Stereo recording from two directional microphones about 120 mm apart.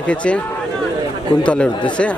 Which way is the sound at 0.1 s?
10° left (ahead or behind).